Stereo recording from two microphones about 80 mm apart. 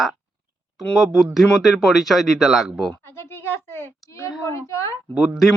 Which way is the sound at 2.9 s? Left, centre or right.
Left.